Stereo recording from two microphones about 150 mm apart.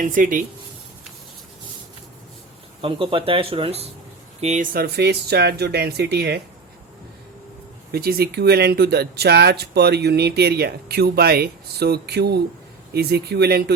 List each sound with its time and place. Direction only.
0.0 s speech: 65° right (ahead or behind)
2.8 s speech: 35° right (ahead or behind)
4.4 s speech: 50° right (ahead or behind); by 6.4 s 90° right
7.9 s speech: 90° right